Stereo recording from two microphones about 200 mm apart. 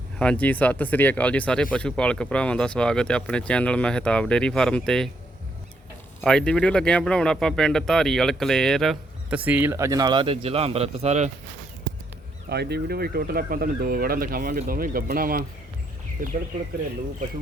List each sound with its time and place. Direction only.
0.2 s speech: 5° left (ahead or behind)
6.2 s speech: 5° left (ahead or behind); by 11.3 s 35° right (ahead or behind)
12.5 s speech: 55° right (ahead or behind)